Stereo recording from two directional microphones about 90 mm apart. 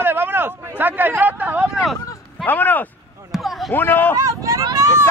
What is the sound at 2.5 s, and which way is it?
Speech, 20° left (ahead or behind).